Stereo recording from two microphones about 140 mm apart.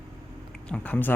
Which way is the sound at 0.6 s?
10° left (ahead or behind).